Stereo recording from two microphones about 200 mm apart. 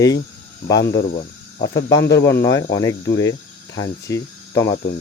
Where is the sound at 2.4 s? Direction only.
15° left (ahead or behind).